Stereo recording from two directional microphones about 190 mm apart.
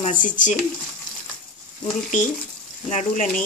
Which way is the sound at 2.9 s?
40° left (ahead or behind).